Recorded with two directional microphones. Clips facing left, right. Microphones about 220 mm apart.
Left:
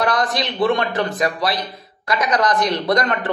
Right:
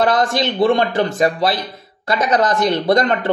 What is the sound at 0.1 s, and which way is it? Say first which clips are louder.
Speech: right 4 dB; 25° right (ahead or behind).